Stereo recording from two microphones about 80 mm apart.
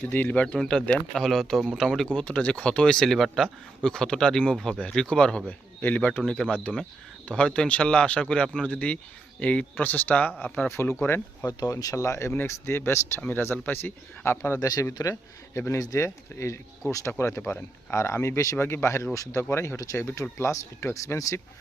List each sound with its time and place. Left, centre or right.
0.1 s speech: left
0.4 s speech: centre; by 10.9 s left
11.4 s speech: left
14.6 s a man's voice: left
15.8 s a man's voice: left
16.0 s speech: left